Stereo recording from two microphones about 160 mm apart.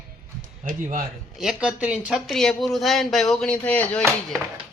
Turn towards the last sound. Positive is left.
turn(degrees=5)  # may be behind; listen again after turning